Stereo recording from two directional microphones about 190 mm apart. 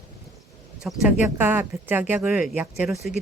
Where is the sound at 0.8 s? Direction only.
Centre (ahead or behind).